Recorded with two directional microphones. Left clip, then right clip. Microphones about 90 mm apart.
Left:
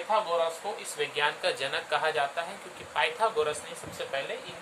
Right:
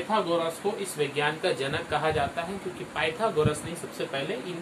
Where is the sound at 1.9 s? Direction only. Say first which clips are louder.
Even; 90° left.